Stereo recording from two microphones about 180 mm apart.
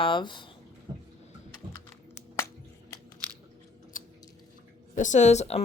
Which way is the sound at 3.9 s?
50° left (ahead or behind).